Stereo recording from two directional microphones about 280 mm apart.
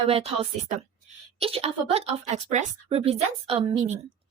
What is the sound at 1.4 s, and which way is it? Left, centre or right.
A woman's voice, right.